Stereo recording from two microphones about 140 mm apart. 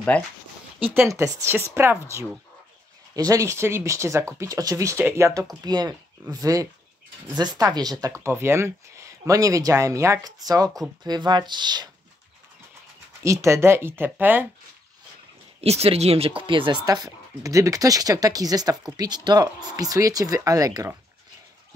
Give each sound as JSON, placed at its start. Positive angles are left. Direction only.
{"t": 0.1, "sound": "speech", "side_deg": 10}
{"t": 0.9, "sound": "speech", "side_deg": -20}
{"t": 5.7, "sound": "speech", "side_deg": -30}
{"t": 13.2, "sound": "speech", "side_deg": -20}
{"t": 15.6, "sound": "speech", "side_deg": -45}